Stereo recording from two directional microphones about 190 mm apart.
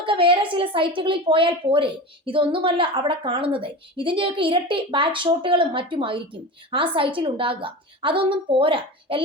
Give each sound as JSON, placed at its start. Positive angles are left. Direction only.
{"t": 0.0, "sound": "speech", "side_deg": -25}